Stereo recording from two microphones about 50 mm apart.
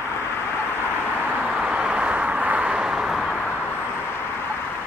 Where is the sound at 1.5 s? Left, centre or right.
Centre; by 2.6 s right.